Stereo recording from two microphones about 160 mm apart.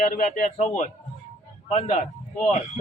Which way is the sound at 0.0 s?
55° left (ahead or behind).